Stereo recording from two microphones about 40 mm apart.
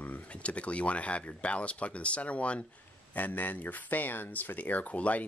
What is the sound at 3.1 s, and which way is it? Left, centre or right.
Speech, left.